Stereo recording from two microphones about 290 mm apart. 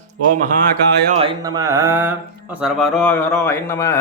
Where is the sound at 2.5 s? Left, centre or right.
Centre.